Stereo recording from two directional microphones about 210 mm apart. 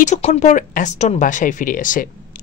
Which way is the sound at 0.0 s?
35° left (ahead or behind).